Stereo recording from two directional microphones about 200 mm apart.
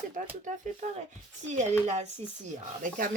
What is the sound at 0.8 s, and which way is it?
Speech, 35° right (ahead or behind).